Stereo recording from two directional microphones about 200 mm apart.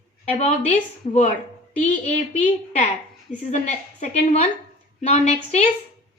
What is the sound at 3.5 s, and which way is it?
A woman's voice, 35° left (ahead or behind).